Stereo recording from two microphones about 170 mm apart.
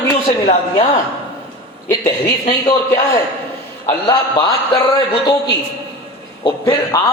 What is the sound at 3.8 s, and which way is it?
Speech, 20° left (ahead or behind).